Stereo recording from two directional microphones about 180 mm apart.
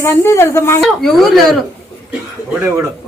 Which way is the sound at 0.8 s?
Centre (ahead or behind).